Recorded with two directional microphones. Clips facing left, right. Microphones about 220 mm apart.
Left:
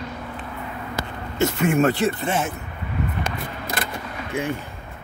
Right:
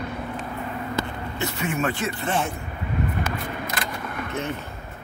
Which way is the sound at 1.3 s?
45° left (ahead or behind).